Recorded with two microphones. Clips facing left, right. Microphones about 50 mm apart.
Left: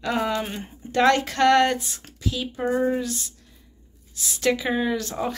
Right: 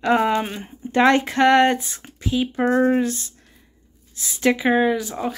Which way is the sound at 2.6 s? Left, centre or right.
Right.